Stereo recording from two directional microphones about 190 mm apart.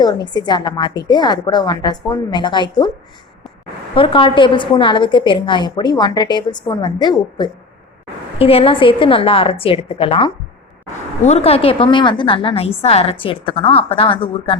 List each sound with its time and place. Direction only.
0.0 s a woman's voice: 20° left (ahead or behind)
3.9 s a woman's voice: 25° left (ahead or behind)